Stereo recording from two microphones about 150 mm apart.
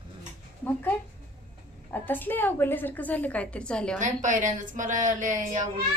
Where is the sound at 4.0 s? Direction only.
55° right (ahead or behind).